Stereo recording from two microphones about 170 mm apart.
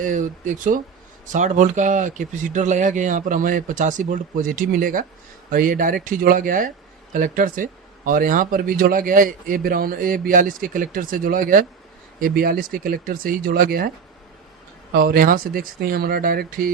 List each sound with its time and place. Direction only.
0.0 s speech: 50° right (ahead or behind)
14.9 s speech: 60° right (ahead or behind)